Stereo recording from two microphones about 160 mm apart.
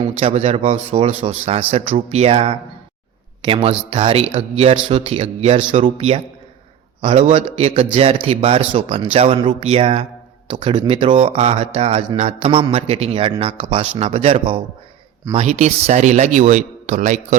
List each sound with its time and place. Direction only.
0.2 s a man's voice: 35° right (ahead or behind)